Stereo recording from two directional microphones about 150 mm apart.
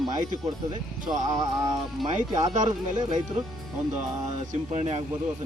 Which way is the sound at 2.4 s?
55° right (ahead or behind).